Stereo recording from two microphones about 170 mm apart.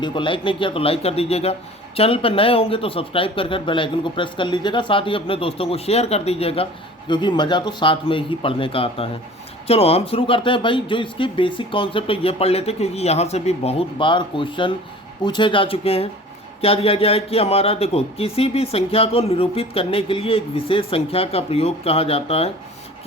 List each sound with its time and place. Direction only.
0.0 s speech: 30° left (ahead or behind)